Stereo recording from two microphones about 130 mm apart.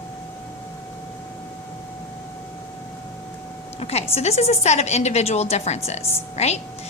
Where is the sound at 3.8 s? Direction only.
55° left (ahead or behind).